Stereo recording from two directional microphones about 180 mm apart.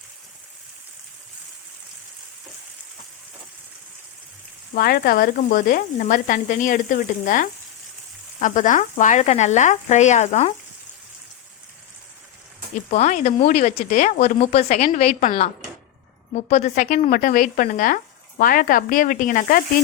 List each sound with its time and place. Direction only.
4.7 s speech: 55° left (ahead or behind); by 10.5 s 40° left (ahead or behind)
12.9 s speech: 40° left (ahead or behind)